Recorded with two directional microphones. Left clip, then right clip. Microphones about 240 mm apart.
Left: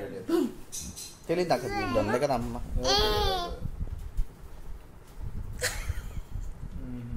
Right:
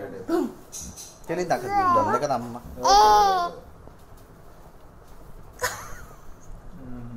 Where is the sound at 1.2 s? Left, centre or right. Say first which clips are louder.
Right 2 dB; left.